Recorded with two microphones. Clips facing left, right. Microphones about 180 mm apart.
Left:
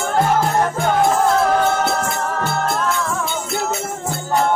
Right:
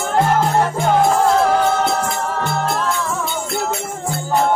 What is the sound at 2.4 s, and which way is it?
Music, 5° left (ahead or behind).